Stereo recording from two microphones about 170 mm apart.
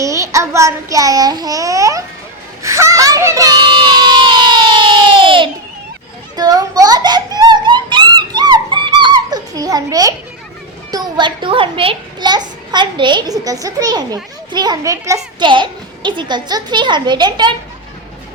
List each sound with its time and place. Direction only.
0.0 s a child's voice: 20° right (ahead or behind)
2.6 s a sound: 15° right (ahead or behind)
10.9 s a child's voice: 25° right (ahead or behind)